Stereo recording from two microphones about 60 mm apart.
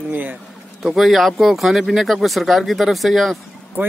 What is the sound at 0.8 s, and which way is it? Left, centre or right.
Speech, centre.